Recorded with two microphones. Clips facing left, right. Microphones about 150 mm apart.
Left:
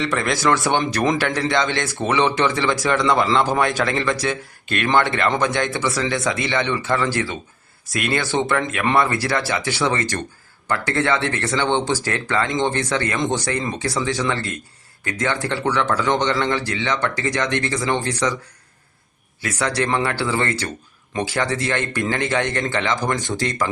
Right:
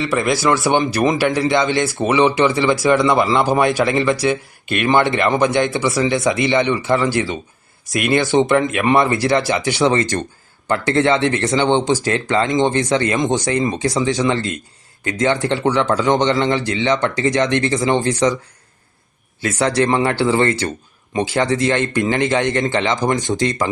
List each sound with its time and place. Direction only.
0.0 s speech: 10° right (ahead or behind)
19.4 s speech: 25° right (ahead or behind)